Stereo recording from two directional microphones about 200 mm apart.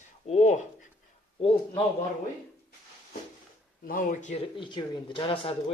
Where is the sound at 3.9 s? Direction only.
45° left (ahead or behind).